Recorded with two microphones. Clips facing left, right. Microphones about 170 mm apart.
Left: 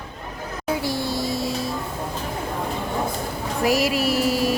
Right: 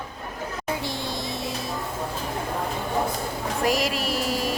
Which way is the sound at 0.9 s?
20° right (ahead or behind).